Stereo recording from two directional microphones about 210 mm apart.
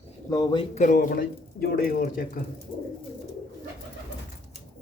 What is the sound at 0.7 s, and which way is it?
Speech, 35° left (ahead or behind).